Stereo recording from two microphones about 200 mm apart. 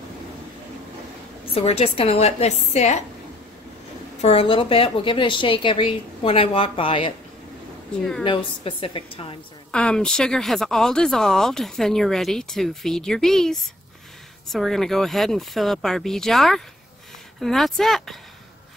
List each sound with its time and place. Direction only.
1.5 s a woman's voice: 30° left (ahead or behind)
4.2 s a woman's voice: 30° left (ahead or behind)
7.9 s speech: 5° left (ahead or behind)
8.2 s a woman's voice: 25° left (ahead or behind)
9.7 s speech: 5° left (ahead or behind)